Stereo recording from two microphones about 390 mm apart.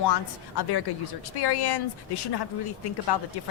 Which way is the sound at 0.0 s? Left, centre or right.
Left.